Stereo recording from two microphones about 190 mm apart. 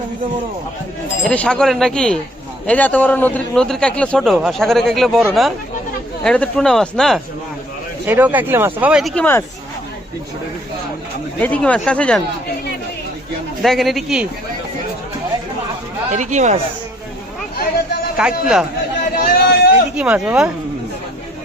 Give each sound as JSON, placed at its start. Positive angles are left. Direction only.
{"t": 1.3, "sound": "a man's voice", "side_deg": 5}
{"t": 8.0, "sound": "speech", "side_deg": -10}
{"t": 11.3, "sound": "speech", "side_deg": 10}
{"t": 13.6, "sound": "a man's voice", "side_deg": 0}
{"t": 16.1, "sound": "speech", "side_deg": -40}
{"t": 18.2, "sound": "a man's voice", "side_deg": -5}
{"t": 19.2, "sound": "a sound", "side_deg": 60}
{"t": 20.0, "sound": "a man's voice", "side_deg": -5}